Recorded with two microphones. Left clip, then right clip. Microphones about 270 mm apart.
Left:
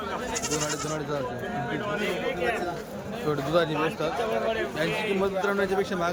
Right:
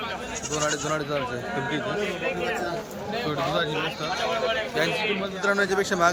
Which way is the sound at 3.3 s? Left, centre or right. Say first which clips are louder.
Left 2 dB; centre.